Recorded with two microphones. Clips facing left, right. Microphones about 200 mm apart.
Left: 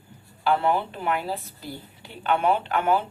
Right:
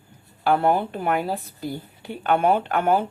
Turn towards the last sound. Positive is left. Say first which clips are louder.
# right 2 dB
turn(degrees=-50)  # may be behind; listen again after turning